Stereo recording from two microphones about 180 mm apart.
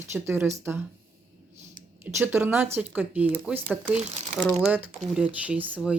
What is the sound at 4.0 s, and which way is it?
Speech, 40° right (ahead or behind).